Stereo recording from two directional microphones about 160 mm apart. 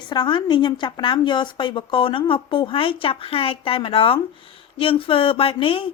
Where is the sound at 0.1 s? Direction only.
30° left (ahead or behind).